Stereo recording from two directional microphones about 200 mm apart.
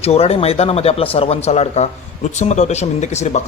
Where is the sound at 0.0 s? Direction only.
30° left (ahead or behind).